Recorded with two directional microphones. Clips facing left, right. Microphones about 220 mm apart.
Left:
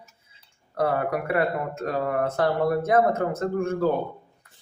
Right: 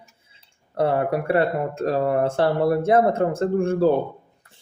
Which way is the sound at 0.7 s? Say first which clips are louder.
Right 3 dB; 25° right (ahead or behind).